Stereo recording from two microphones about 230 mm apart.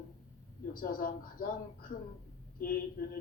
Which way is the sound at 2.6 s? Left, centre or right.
Left.